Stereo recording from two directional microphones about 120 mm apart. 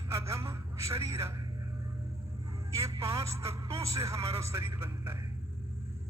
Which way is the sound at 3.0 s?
25° right (ahead or behind).